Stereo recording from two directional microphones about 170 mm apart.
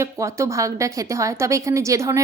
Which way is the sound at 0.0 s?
15° right (ahead or behind).